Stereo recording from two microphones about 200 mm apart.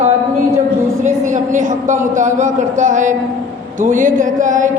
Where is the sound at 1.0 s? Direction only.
40° right (ahead or behind).